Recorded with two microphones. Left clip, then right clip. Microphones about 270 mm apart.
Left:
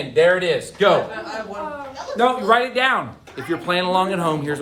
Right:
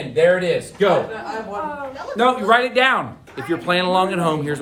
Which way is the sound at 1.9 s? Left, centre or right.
Centre.